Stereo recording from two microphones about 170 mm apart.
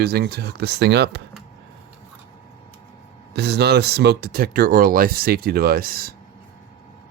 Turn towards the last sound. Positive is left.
turn(degrees=-60)  # may be behind; listen again after turning